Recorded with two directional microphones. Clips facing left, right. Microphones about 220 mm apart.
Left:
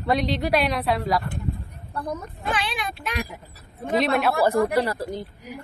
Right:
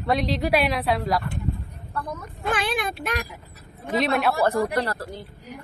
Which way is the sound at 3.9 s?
Centre (ahead or behind).